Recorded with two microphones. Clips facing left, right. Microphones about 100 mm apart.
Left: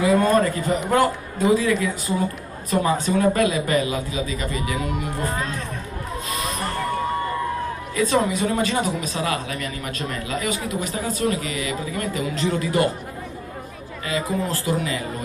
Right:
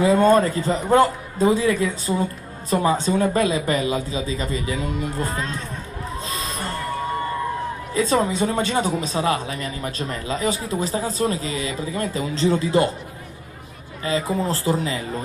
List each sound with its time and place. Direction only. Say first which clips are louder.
0.0 s a man's voice: right 2 dB; 30° right (ahead or behind)
6.2 s a sound: left 3 dB; 30° right (ahead or behind)
7.9 s speech: right 1 dB; 30° right (ahead or behind)
14.0 s speech: right 2 dB; 30° right (ahead or behind)